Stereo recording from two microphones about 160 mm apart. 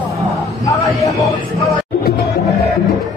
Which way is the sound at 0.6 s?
20° left (ahead or behind).